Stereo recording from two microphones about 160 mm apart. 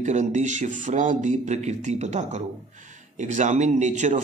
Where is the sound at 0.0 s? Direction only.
50° right (ahead or behind).